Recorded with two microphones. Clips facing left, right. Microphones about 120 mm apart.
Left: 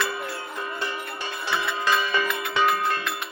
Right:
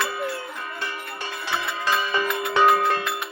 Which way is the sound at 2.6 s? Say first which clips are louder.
Right 5 dB; 70° right (ahead or behind).